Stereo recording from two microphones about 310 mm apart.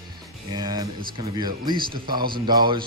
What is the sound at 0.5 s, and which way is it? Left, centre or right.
A man's voice, centre.